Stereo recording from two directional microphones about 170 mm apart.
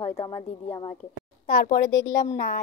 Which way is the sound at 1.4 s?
65° left (ahead or behind).